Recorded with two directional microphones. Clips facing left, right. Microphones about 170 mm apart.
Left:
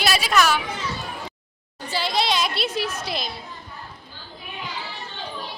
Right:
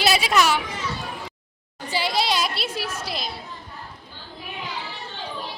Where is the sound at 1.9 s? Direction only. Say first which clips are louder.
Even; 10° right (ahead or behind).